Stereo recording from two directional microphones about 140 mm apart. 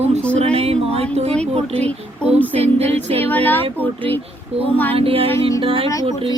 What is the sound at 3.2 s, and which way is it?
Speech, 15° left (ahead or behind).